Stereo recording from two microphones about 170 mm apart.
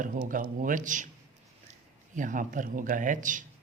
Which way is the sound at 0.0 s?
50° right (ahead or behind).